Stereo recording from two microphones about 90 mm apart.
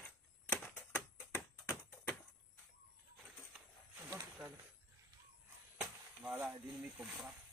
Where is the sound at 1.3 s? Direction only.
25° left (ahead or behind).